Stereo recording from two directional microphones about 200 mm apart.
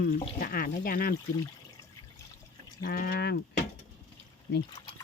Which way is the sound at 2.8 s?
45° left (ahead or behind).